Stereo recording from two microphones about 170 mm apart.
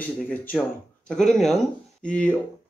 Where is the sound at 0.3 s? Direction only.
5° left (ahead or behind).